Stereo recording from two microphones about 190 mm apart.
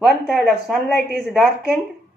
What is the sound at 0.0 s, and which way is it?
A woman's voice, centre (ahead or behind).